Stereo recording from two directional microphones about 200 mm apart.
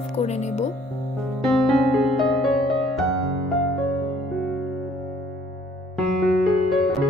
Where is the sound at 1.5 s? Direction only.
Centre (ahead or behind).